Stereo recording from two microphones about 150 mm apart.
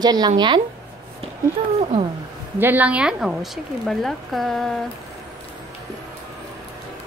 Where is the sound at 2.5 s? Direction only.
10° right (ahead or behind).